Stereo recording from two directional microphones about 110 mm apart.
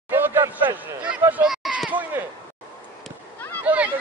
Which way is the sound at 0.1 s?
20° right (ahead or behind).